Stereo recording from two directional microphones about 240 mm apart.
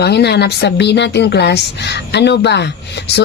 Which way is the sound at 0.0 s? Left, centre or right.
Left.